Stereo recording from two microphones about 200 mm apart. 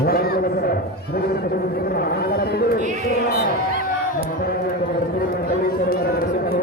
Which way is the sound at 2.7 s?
40° right (ahead or behind).